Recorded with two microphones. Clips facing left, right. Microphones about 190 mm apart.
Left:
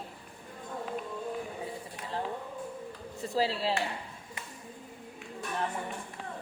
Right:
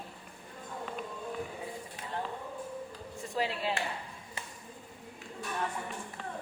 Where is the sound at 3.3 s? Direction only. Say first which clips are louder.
Left 3 dB; 30° left (ahead or behind).